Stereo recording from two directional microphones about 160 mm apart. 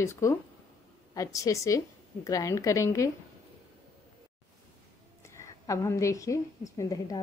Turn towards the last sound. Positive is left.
turn(degrees=20)  # may be behind; listen again after turning